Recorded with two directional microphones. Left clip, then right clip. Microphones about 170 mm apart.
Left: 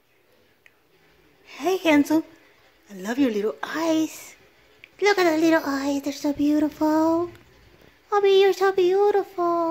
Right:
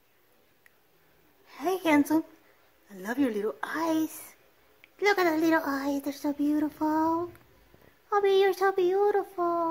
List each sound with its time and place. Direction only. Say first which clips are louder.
1.5 s a woman's voice: left 5 dB; 15° left (ahead or behind)